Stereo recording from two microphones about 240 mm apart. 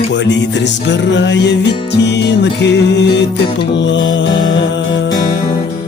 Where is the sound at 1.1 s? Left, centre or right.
Left.